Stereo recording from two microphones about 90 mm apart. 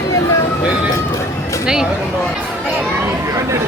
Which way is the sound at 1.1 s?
35° left (ahead or behind).